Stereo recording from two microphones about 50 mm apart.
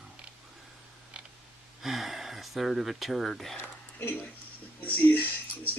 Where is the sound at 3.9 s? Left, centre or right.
Left.